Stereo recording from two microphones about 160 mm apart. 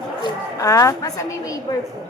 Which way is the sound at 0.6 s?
20° left (ahead or behind).